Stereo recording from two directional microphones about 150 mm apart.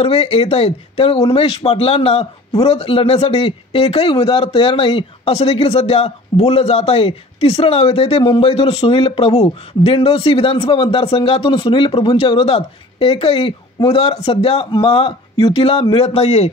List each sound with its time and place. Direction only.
0.0 s speech: 40° left (ahead or behind)